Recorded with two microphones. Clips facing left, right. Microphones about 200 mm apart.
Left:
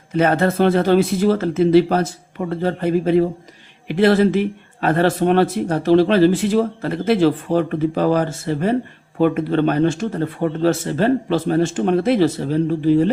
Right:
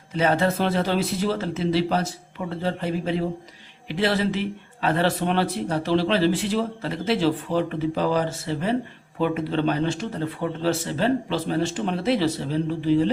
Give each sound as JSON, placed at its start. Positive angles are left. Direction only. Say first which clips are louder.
{"t": 0.1, "sound": "speech", "louder": "left 5 dB", "side_deg": 55}